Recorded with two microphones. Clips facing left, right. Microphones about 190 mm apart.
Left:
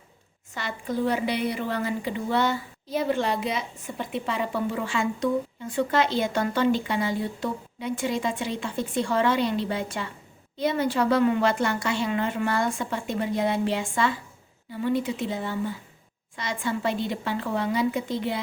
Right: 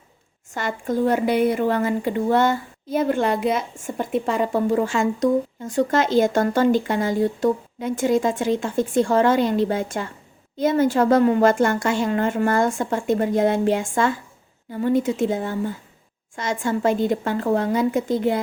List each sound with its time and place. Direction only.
0.5 s speech: 45° right (ahead or behind)